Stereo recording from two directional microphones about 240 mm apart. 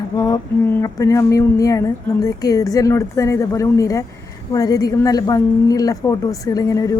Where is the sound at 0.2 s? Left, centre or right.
Centre.